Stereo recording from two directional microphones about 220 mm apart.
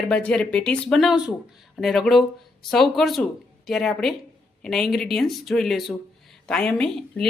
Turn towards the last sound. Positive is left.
turn(degrees=5)  # may be behind; listen again after turning